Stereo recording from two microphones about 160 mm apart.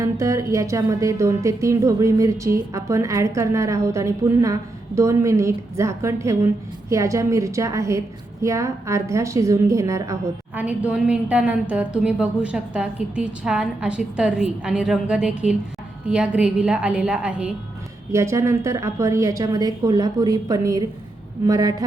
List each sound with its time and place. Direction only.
0.0 s a woman's voice: 20° right (ahead or behind)
18.1 s speech: 20° right (ahead or behind)